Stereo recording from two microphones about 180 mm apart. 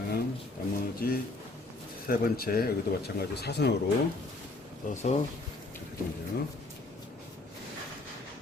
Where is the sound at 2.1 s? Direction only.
55° left (ahead or behind).